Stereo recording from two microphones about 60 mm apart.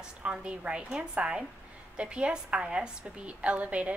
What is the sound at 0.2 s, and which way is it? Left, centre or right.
A woman's voice, centre.